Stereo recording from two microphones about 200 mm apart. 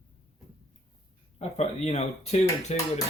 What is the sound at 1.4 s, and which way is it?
Speech, 30° left (ahead or behind).